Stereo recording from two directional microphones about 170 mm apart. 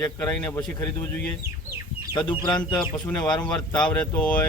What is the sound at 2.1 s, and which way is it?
Speech, 25° left (ahead or behind).